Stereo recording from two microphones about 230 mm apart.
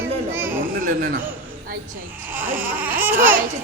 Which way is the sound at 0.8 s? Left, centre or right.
Right.